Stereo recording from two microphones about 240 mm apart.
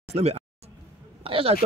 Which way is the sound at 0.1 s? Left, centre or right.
Right.